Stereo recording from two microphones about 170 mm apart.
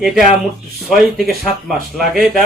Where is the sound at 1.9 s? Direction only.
Centre (ahead or behind).